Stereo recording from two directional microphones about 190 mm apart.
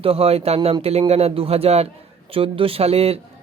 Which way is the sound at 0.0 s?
30° right (ahead or behind).